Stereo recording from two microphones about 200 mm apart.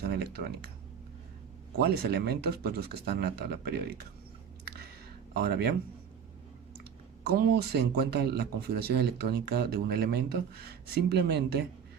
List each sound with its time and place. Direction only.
0.0 s typing: 50° right (ahead or behind)
1.8 s speech: 50° right (ahead or behind)
4.6 s a sound: 50° right (ahead or behind)
5.3 s speech: 50° right (ahead or behind)
7.3 s speech: 50° right (ahead or behind)